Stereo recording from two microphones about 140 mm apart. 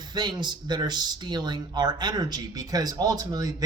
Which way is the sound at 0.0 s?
30° right (ahead or behind).